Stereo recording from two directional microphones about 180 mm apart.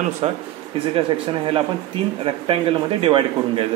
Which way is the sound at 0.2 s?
35° right (ahead or behind).